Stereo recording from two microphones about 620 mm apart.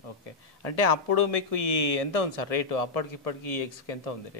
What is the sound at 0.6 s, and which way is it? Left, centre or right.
Speech, left.